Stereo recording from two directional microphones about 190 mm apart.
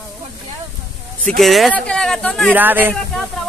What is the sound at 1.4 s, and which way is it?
Speech, centre (ahead or behind).